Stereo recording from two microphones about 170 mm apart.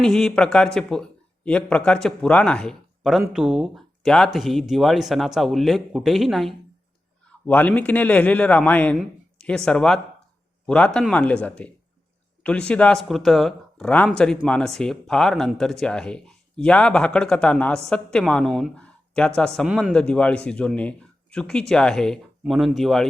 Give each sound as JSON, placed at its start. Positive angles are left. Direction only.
{"t": 0.0, "sound": "a man's voice", "side_deg": 5}
{"t": 19.6, "sound": "speech", "side_deg": -10}
{"t": 19.9, "sound": "a man's voice", "side_deg": 5}